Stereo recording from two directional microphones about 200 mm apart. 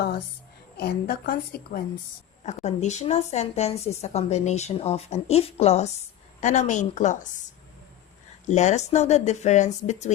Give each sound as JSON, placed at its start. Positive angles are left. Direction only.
{"t": 0.8, "sound": "a woman's voice", "side_deg": 50}
{"t": 2.5, "sound": "a woman's voice", "side_deg": 35}
{"t": 8.4, "sound": "a woman's voice", "side_deg": 35}